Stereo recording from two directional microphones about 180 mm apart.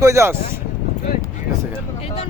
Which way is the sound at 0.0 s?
15° right (ahead or behind).